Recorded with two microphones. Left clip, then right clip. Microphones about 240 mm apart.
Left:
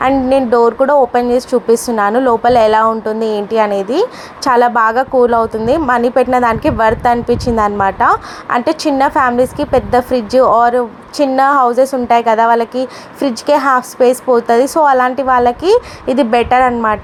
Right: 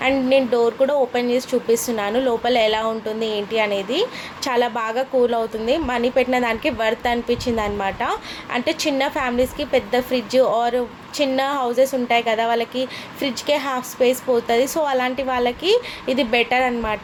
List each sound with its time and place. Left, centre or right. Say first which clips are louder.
0.0 s a woman's voice: left 6 dB; left